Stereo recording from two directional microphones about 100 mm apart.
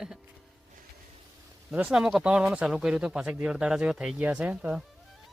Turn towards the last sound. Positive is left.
turn(degrees=-10)  # may be behind; listen again after turning